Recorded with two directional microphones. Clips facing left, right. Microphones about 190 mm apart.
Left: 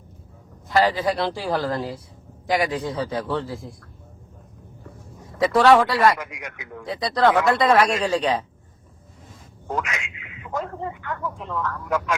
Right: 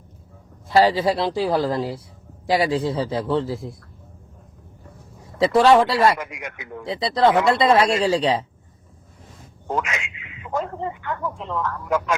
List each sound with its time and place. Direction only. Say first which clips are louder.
1.0 s speech: right 3 dB; 25° right (ahead or behind)
5.4 s speech: right 1 dB; 25° right (ahead or behind)
9.6 s a man's voice: right 2 dB; 25° right (ahead or behind)